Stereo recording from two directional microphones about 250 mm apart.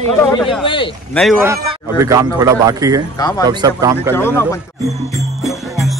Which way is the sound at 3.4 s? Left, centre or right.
Centre.